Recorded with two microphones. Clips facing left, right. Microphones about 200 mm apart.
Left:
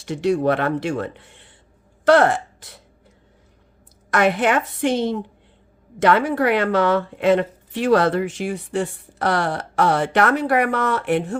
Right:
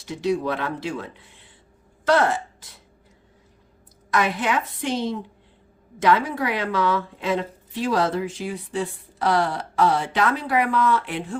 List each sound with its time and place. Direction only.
0.0 s a woman's voice: 65° left (ahead or behind)
4.1 s a woman's voice: 60° left (ahead or behind)